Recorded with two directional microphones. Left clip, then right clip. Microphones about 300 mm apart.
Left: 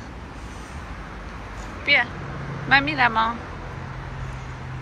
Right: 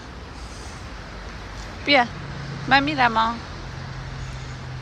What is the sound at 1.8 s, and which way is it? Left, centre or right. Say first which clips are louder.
Speech: right 1 dB; centre.